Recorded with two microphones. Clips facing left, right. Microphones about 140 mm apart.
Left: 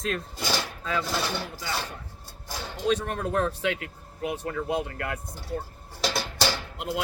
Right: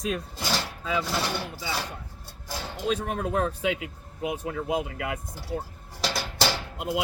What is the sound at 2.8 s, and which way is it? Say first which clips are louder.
Speech: left 2 dB; 5° right (ahead or behind).